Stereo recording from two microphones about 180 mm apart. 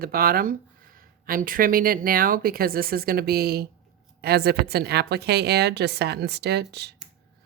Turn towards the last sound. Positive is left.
turn(degrees=-65)  # may be behind; listen again after turning